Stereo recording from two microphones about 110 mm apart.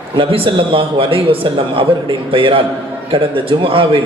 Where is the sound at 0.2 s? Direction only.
55° right (ahead or behind).